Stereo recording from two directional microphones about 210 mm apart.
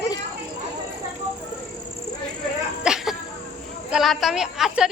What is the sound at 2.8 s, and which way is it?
Sneeze, centre (ahead or behind).